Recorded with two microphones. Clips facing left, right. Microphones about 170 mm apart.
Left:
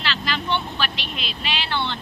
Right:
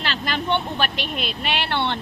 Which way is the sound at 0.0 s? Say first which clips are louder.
Right 1 dB; 50° right (ahead or behind).